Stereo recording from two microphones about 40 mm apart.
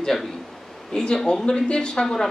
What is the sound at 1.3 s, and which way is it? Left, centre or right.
Speech, left.